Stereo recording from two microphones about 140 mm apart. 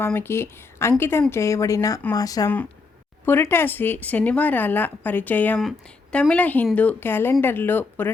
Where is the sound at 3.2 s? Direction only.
15° left (ahead or behind).